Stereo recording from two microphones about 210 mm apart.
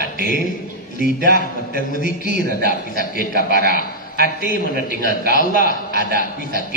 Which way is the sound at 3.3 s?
45° right (ahead or behind).